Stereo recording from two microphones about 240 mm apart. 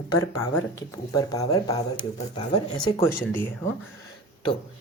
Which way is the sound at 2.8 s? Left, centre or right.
Centre.